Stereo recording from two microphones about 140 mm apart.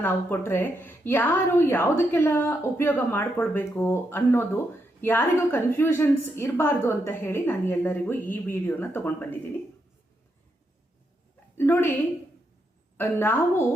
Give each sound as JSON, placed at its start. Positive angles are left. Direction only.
{"t": 0.0, "sound": "a woman's voice", "side_deg": 15}
{"t": 11.5, "sound": "a woman's voice", "side_deg": 15}
{"t": 13.0, "sound": "a woman's voice", "side_deg": 15}